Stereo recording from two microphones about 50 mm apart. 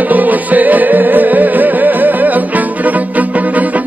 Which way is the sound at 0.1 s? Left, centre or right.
Right.